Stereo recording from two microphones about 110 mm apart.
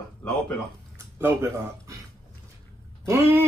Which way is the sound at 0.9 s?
25° right (ahead or behind).